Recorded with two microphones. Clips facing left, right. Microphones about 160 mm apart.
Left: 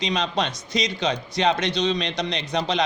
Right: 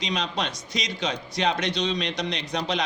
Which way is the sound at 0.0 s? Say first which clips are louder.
Left 4 dB; 25° left (ahead or behind).